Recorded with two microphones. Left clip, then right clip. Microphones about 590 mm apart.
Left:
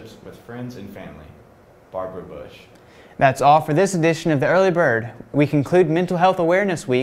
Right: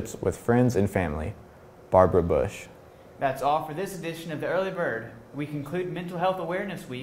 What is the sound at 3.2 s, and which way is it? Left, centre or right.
Speech, left.